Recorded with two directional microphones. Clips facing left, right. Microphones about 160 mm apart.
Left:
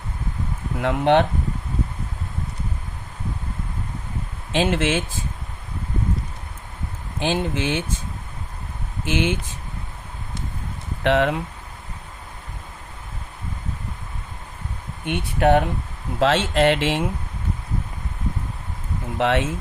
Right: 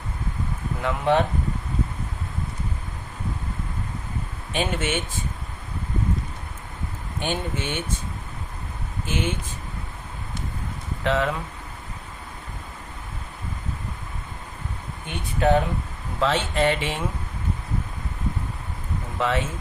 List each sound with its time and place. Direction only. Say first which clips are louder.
0.8 s speech: left 4 dB; 65° left (ahead or behind)
4.5 s speech: left 5 dB; 90° left
7.2 s speech: left 5 dB; 90° left
9.0 s speech: left 5 dB; 90° left
11.0 s speech: left 4 dB; 70° left (ahead or behind)
15.0 s speech: left 3 dB; 70° left (ahead or behind)
16.2 s speech: left 4 dB; 80° left
19.2 s speech: left 4 dB; 75° left (ahead or behind)